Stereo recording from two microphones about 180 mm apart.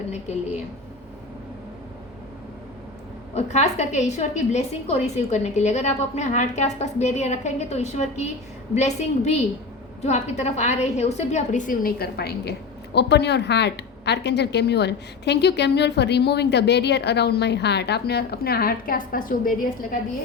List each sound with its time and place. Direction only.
0.1 s a woman's voice: 40° left (ahead or behind)
3.3 s a woman's voice: 40° left (ahead or behind)